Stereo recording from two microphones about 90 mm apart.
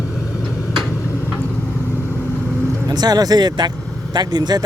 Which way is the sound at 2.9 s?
50° right (ahead or behind).